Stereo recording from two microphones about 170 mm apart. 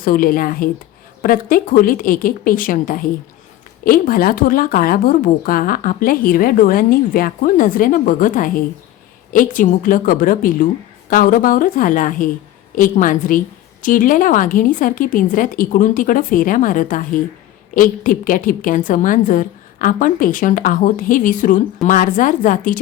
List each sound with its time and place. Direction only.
0.0 s a woman's voice: 55° left (ahead or behind)